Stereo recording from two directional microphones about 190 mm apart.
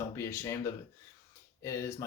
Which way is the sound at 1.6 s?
15° left (ahead or behind).